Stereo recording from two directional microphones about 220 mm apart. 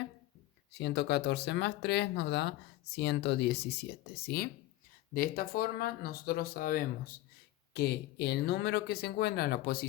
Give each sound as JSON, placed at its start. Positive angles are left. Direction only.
{"t": 0.7, "sound": "speech", "side_deg": 50}